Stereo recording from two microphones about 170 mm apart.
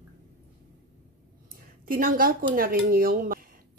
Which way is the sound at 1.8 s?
55° right (ahead or behind).